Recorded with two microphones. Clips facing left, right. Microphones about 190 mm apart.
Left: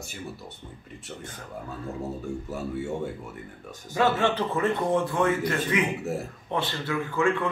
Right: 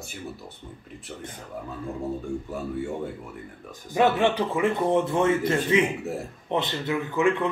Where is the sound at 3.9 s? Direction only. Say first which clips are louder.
Right 2 dB; 15° right (ahead or behind).